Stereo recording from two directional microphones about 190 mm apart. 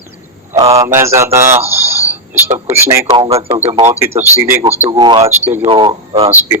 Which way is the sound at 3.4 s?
15° right (ahead or behind).